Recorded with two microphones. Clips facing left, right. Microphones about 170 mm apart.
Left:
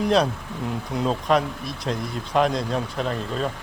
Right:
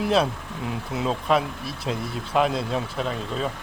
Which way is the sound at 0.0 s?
5° right (ahead or behind).